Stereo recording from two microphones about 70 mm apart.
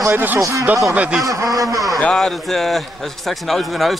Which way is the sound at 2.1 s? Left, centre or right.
Centre.